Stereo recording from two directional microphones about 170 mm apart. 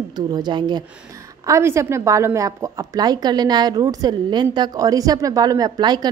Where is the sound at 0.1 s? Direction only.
25° right (ahead or behind).